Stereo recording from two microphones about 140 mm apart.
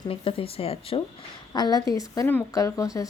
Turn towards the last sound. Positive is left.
turn(degrees=25)  # may be behind; listen again after turning